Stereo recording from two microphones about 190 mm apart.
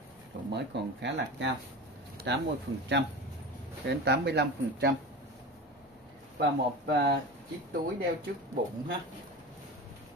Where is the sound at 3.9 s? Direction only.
60° right (ahead or behind).